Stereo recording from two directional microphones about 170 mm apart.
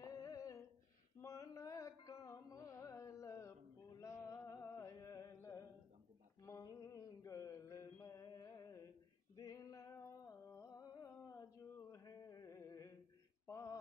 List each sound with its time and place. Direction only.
0.0 s humming: 20° left (ahead or behind)
1.2 s music: 20° left (ahead or behind)
6.4 s mantra: 20° left (ahead or behind)
9.4 s music: 20° left (ahead or behind)
13.5 s mantra: 20° left (ahead or behind)